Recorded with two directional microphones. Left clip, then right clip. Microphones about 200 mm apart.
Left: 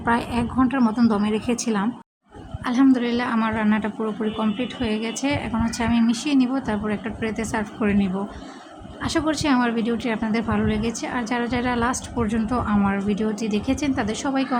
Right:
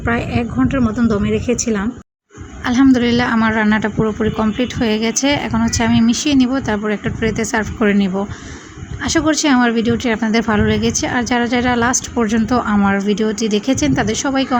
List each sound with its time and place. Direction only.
0.0 s a woman's voice: 5° right (ahead or behind)
2.6 s a woman's voice: 20° right (ahead or behind)